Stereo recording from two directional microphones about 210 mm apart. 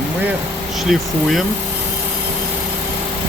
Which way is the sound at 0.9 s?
Centre (ahead or behind).